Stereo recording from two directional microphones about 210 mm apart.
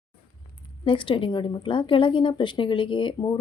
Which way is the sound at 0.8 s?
25° left (ahead or behind).